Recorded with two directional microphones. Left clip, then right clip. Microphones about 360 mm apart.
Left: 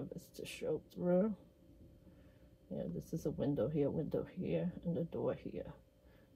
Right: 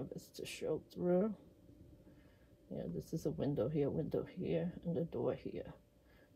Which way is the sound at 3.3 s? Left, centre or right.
Centre.